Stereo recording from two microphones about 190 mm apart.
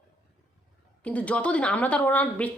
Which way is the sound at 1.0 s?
5° left (ahead or behind).